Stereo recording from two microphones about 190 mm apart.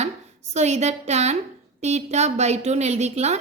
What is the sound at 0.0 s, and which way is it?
A woman's voice, 35° right (ahead or behind).